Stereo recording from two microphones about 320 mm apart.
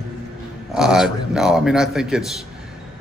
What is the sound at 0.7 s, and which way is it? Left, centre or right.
A man's voice, centre.